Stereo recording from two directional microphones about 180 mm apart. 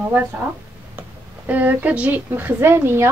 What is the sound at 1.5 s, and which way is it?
Speech, 10° right (ahead or behind).